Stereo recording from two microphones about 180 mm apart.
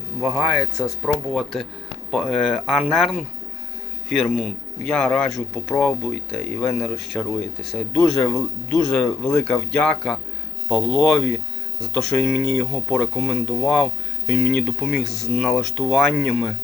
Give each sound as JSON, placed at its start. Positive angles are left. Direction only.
{"t": 0.2, "sound": "speech", "side_deg": -5}